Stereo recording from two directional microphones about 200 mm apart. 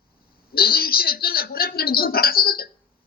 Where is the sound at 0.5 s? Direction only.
50° left (ahead or behind).